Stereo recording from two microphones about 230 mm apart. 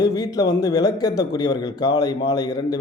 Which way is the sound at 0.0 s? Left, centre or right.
Centre.